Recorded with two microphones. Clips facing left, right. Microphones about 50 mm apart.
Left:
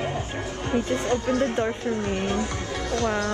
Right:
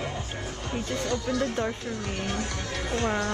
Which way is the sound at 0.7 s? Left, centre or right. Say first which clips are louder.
Left 6 dB; left.